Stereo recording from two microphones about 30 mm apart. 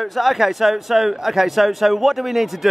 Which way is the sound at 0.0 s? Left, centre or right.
Centre.